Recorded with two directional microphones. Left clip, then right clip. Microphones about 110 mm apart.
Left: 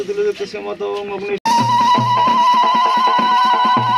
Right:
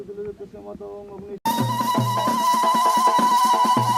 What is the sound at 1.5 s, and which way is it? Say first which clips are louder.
Music: left 10 dB; 35° left (ahead or behind).